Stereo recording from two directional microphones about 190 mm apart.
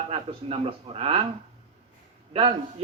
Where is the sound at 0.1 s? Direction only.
30° right (ahead or behind).